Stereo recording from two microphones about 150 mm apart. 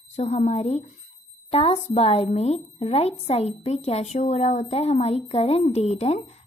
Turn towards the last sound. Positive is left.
turn(degrees=45)  # may be behind; listen again after turning